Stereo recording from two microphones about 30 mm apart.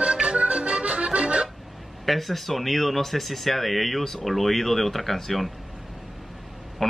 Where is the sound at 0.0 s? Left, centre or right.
Right.